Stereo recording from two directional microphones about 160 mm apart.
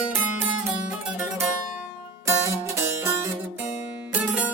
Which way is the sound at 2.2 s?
15° right (ahead or behind).